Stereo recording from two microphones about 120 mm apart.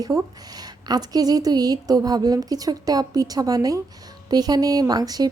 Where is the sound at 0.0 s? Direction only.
30° right (ahead or behind).